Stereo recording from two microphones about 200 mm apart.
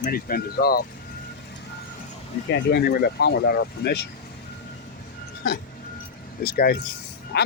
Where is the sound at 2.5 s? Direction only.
50° left (ahead or behind).